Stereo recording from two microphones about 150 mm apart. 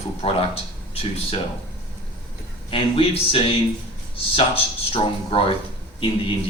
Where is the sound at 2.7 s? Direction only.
40° left (ahead or behind).